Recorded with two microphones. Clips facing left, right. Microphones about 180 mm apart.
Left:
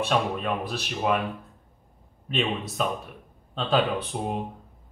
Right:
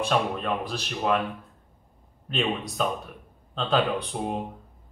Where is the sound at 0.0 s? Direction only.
5° left (ahead or behind).